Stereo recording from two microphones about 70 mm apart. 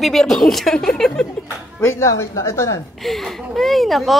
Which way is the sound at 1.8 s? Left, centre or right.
Left.